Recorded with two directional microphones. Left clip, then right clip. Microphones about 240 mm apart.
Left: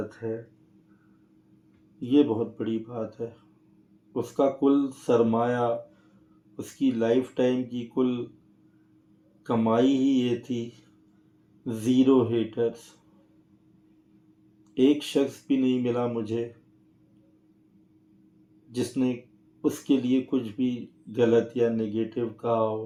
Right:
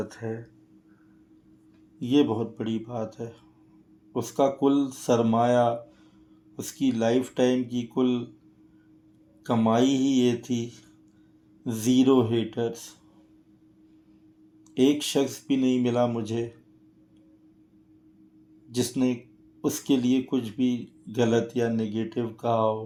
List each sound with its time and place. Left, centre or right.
0.1 s speech: right
2.0 s speech: right
9.4 s speech: right
14.8 s speech: right
18.7 s speech: right